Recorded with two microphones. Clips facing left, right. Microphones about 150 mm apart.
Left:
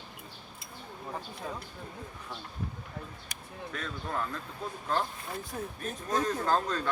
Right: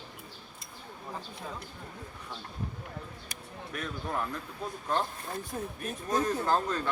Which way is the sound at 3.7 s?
15° right (ahead or behind).